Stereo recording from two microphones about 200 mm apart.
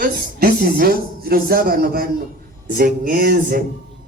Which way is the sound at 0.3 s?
45° right (ahead or behind).